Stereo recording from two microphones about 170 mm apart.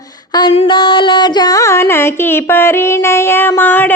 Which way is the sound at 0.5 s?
35° left (ahead or behind).